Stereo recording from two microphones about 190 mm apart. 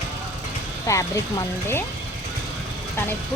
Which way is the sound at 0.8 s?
15° left (ahead or behind).